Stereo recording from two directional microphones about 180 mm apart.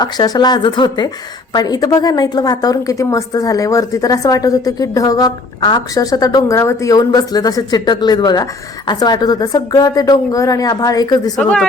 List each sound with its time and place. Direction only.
0.0 s a woman's voice: 25° left (ahead or behind)
11.3 s speech: 5° left (ahead or behind)